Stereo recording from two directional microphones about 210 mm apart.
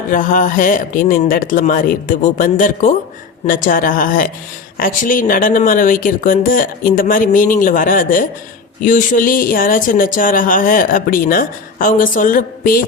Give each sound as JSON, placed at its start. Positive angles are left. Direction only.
{"t": 0.1, "sound": "speech", "side_deg": 40}